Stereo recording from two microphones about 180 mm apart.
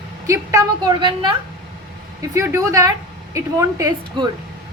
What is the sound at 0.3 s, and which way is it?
A woman's voice, 20° right (ahead or behind).